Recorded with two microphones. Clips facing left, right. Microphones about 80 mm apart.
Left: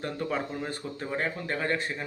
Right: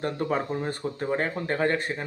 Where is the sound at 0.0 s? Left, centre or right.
Right.